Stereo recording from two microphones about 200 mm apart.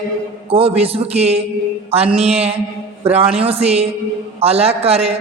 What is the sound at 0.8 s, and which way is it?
A man's voice, 30° right (ahead or behind).